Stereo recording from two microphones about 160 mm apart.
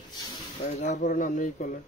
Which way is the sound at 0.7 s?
40° left (ahead or behind).